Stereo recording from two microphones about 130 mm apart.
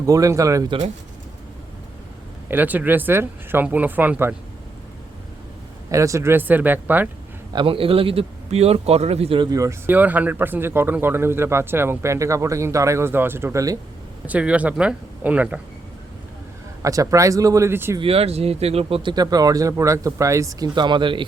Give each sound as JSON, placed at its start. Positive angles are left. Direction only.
{"t": 0.0, "sound": "speech", "side_deg": -25}
{"t": 2.5, "sound": "speech", "side_deg": -15}
{"t": 5.9, "sound": "speech", "side_deg": -25}
{"t": 7.5, "sound": "a man's voice", "side_deg": -40}
{"t": 9.4, "sound": "speech", "side_deg": -25}
{"t": 14.3, "sound": "speech", "side_deg": -10}
{"t": 16.8, "sound": "speech", "side_deg": -25}
{"t": 18.0, "sound": "a man's voice", "side_deg": -50}
{"t": 19.1, "sound": "speech", "side_deg": -30}